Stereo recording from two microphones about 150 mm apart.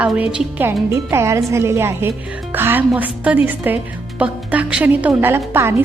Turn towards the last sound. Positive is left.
turn(degrees=-15)  # may be behind; listen again after turning